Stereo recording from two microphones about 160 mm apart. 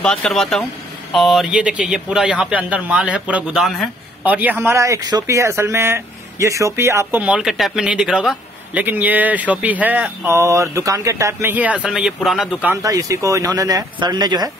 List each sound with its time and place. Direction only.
0.0 s speech: 5° left (ahead or behind)
12.8 s speech: 20° right (ahead or behind)